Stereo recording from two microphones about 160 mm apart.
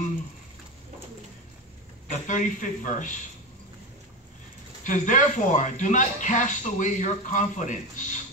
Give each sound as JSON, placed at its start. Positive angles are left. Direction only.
{"t": 2.2, "sound": "speech", "side_deg": 50}
{"t": 4.8, "sound": "speech", "side_deg": 50}